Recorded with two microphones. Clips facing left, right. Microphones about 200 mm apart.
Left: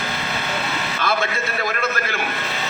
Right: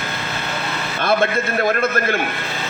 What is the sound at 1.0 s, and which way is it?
A man's voice, 55° right (ahead or behind).